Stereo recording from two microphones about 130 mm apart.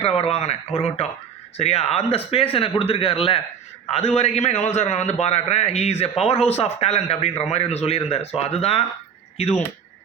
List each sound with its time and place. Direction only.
0.0 s a man's voice: 50° left (ahead or behind)